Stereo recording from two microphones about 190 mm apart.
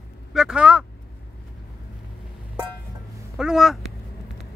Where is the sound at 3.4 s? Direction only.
Centre (ahead or behind).